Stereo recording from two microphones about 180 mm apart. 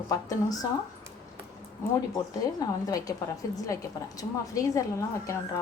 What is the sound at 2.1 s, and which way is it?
A woman's voice, 20° left (ahead or behind).